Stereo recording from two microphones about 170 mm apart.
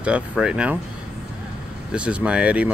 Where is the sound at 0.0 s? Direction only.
5° right (ahead or behind).